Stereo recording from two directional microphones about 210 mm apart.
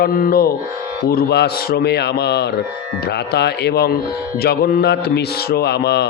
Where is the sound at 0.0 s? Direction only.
45° left (ahead or behind).